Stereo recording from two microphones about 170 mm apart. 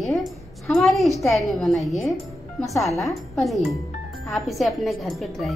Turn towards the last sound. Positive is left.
turn(degrees=0)  # may be behind; listen again after turning